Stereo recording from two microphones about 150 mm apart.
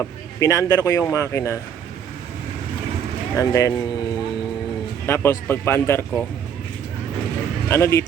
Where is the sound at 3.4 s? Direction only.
20° left (ahead or behind).